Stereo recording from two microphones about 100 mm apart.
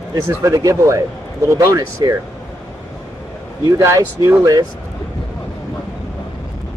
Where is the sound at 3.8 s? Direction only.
25° right (ahead or behind).